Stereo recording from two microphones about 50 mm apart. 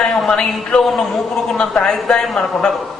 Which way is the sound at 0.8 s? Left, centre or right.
Centre.